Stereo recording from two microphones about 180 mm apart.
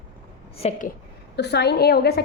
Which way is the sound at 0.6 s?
35° left (ahead or behind).